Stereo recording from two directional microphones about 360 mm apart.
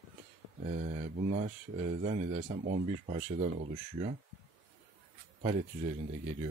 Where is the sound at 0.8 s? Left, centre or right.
Centre.